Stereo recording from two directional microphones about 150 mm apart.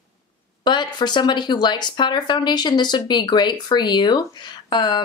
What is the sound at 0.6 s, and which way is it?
Speech, 30° left (ahead or behind).